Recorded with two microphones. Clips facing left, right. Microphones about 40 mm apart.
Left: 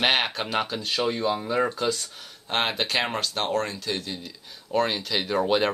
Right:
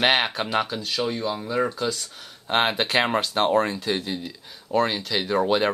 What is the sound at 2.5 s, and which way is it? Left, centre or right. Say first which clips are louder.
Speech: right 4 dB; centre.